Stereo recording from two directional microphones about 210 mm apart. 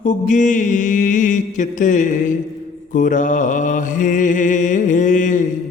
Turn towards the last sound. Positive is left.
turn(degrees=35)  # may be behind; listen again after turning